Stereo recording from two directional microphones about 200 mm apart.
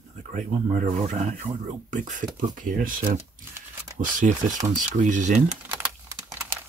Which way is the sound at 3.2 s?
10° right (ahead or behind).